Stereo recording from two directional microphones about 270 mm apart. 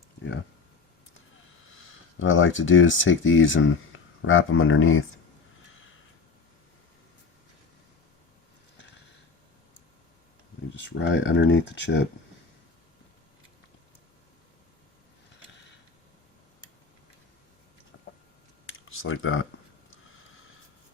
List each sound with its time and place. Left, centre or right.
1.7 s speech: left
3.9 s a sound: left
4.3 s speech: left
10.8 s speech: left
17.9 s a sound: left
18.6 s computer keyboard: left